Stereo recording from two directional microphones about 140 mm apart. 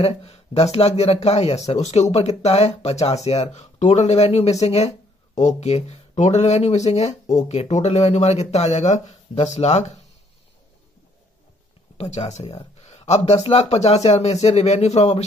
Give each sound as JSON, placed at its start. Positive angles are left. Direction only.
{"t": 0.0, "sound": "speech", "side_deg": 45}
{"t": 12.0, "sound": "speech", "side_deg": 50}